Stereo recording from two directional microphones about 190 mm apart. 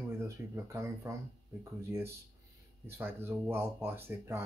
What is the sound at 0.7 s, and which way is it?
Speech, 15° right (ahead or behind).